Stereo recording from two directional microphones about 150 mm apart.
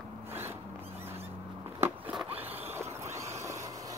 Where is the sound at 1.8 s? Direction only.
15° right (ahead or behind).